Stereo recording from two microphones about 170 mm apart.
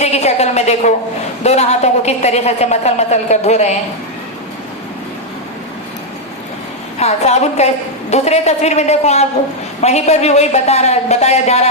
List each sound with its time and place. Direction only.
0.0 s a woman's voice: 40° left (ahead or behind)
7.0 s a woman's voice: 40° left (ahead or behind)